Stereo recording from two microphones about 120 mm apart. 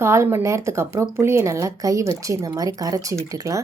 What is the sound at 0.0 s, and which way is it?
Speech, 20° right (ahead or behind).